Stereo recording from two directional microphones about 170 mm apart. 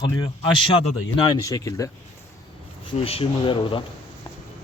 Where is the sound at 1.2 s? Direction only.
25° left (ahead or behind).